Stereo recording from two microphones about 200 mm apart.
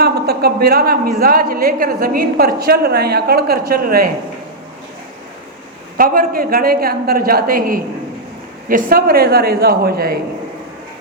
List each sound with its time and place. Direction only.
0.0 s a man's voice: 50° right (ahead or behind)
6.0 s a man's voice: 45° right (ahead or behind)